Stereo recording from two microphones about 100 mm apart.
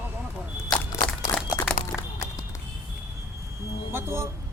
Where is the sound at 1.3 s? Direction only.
40° left (ahead or behind).